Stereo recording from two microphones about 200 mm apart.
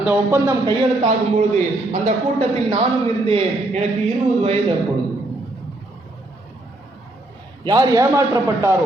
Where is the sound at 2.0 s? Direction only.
35° right (ahead or behind).